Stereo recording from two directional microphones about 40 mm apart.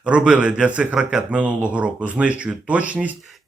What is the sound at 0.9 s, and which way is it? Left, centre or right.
Speech, centre.